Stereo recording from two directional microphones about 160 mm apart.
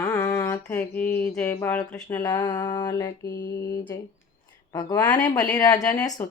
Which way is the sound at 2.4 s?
25° left (ahead or behind).